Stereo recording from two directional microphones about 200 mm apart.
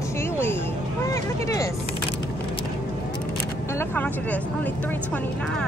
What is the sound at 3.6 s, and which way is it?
Speech, 10° left (ahead or behind).